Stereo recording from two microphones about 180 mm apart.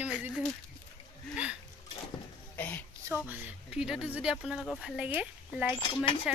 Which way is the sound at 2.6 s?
10° left (ahead or behind).